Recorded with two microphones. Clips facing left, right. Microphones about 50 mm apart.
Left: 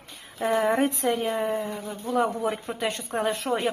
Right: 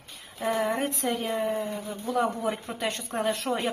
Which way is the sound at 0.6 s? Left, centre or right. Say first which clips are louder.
Left 6 dB; left.